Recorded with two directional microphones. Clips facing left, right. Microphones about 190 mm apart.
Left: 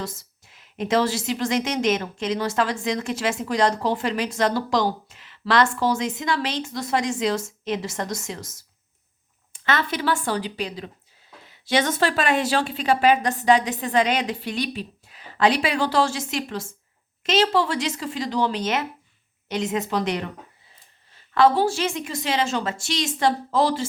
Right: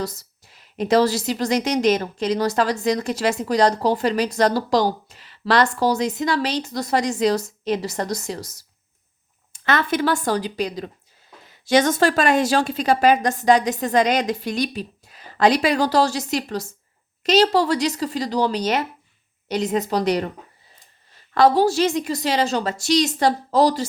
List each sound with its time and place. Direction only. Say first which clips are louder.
0.0 s a woman's voice: right 5 dB; 40° right (ahead or behind)
9.5 s a woman's voice: right 4 dB; 45° right (ahead or behind)
21.3 s a woman's voice: right 3 dB; 40° right (ahead or behind)